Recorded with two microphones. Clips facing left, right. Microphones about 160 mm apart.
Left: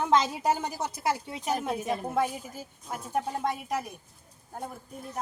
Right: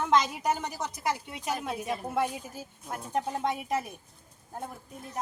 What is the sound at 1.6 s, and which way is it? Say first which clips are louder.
Speech: left 3 dB; 20° left (ahead or behind).